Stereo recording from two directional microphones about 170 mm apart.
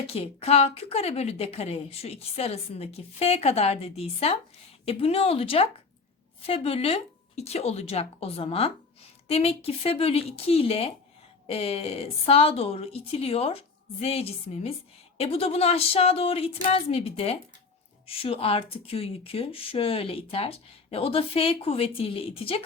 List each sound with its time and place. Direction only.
0.1 s speech: 35° left (ahead or behind)